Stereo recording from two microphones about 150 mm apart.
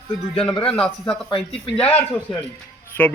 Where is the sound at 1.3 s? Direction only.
35° left (ahead or behind).